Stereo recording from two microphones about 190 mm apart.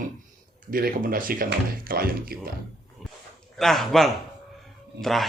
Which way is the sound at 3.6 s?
Centre (ahead or behind).